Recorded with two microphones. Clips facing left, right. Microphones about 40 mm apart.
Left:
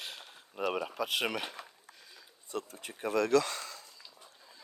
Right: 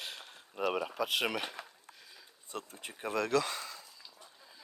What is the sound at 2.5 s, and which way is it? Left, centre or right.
Speech, centre.